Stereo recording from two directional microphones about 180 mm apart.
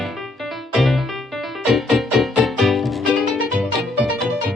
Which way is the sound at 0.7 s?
Centre (ahead or behind).